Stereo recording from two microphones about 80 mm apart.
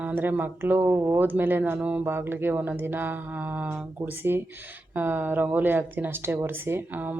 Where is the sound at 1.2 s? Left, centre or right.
Right.